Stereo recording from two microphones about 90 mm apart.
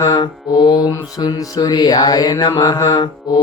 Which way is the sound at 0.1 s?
55° left (ahead or behind).